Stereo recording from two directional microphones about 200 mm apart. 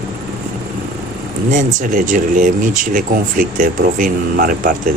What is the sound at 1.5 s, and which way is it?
Speech, 40° right (ahead or behind).